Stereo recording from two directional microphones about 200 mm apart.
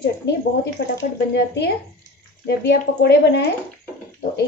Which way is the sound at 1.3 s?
60° left (ahead or behind).